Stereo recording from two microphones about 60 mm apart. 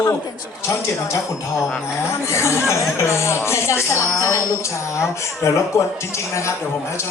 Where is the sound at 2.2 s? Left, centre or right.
Left.